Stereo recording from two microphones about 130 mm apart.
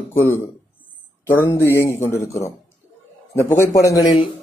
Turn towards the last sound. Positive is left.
turn(degrees=25)  # may be behind; listen again after turning